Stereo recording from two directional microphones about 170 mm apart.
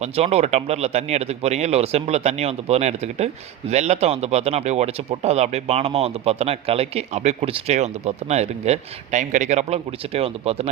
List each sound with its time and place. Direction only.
0.0 s speech: 40° right (ahead or behind)